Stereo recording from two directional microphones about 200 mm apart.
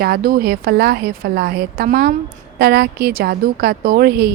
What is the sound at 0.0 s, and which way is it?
A woman's voice, 50° right (ahead or behind).